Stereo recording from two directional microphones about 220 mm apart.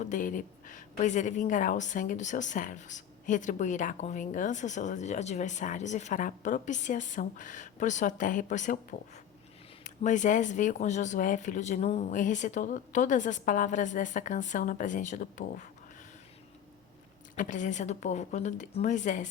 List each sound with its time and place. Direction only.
0.0 s a woman's voice: 35° left (ahead or behind)
17.3 s a woman's voice: 35° left (ahead or behind)